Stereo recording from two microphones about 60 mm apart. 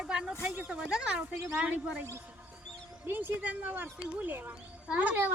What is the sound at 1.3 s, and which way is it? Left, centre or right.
Speech, right.